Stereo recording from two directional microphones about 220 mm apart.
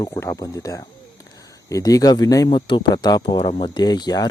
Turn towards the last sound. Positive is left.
turn(degrees=20)  # may be behind; listen again after turning